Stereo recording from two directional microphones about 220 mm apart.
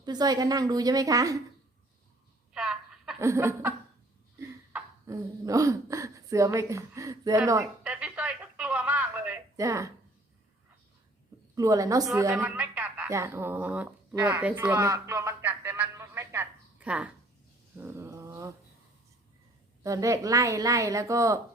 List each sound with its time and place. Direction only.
0.0 s speech: 20° right (ahead or behind)
2.5 s a sound: 5° right (ahead or behind)
11.5 s speech: 15° right (ahead or behind)
12.0 s a sound: 10° right (ahead or behind)
17.7 s mantra: 10° right (ahead or behind)
19.8 s speech: 15° right (ahead or behind)